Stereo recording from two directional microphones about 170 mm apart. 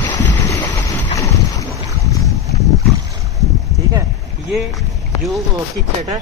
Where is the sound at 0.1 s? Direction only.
25° left (ahead or behind).